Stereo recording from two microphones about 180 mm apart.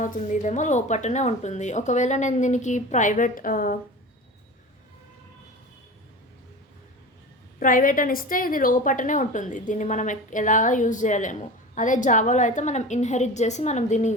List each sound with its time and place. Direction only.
0.0 s speech: 45° left (ahead or behind)
7.6 s a woman's voice: 50° left (ahead or behind)